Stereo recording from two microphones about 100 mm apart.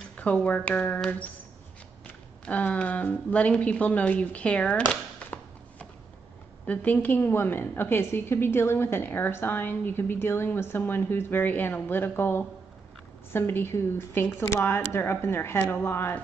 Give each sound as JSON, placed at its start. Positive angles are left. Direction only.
{"t": 0.2, "sound": "speech", "side_deg": 15}
{"t": 2.4, "sound": "a woman's voice", "side_deg": 15}